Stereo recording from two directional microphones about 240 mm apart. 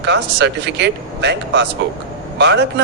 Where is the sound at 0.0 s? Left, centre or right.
Right.